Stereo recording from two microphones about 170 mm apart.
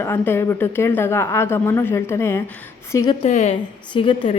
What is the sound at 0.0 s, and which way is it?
A woman's voice, 15° left (ahead or behind).